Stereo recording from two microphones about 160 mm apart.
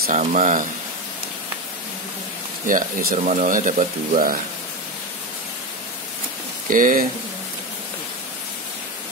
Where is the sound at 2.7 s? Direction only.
55° right (ahead or behind).